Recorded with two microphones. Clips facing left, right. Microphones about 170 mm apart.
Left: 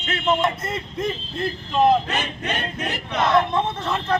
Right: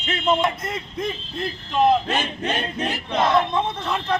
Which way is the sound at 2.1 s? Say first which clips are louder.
Right 2 dB; 30° right (ahead or behind).